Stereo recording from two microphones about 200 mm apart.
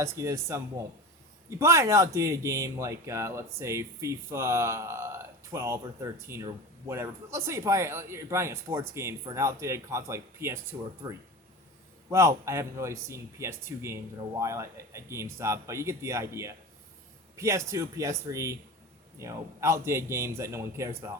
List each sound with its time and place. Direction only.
0.0 s speech: 15° right (ahead or behind)